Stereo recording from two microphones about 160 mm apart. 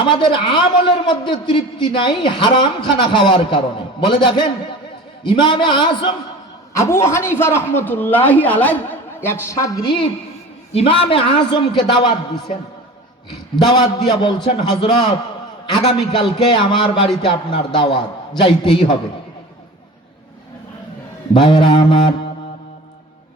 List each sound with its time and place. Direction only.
0.0 s a man's voice: 30° left (ahead or behind)
6.7 s a man's voice: 15° left (ahead or behind)
13.6 s a man's voice: 25° left (ahead or behind)
21.3 s a man's voice: 30° left (ahead or behind)